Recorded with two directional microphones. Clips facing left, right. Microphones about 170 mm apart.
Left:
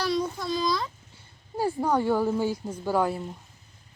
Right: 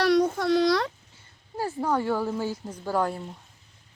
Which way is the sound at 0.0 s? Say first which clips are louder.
Right 6 dB; 75° right (ahead or behind).